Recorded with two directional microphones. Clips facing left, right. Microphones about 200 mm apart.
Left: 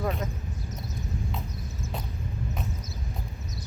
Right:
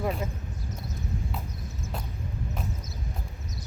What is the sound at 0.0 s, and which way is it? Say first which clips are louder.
Speech: even; 5° right (ahead or behind).